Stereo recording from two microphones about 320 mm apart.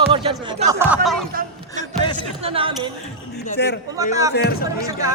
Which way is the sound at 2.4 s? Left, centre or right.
Centre.